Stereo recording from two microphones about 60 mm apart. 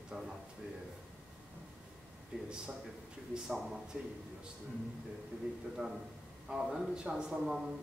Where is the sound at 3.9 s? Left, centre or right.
Centre.